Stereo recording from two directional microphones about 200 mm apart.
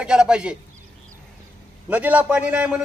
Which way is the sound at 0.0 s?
5° right (ahead or behind).